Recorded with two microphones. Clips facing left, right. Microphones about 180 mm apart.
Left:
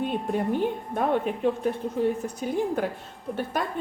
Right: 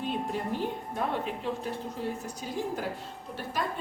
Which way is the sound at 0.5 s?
55° left (ahead or behind).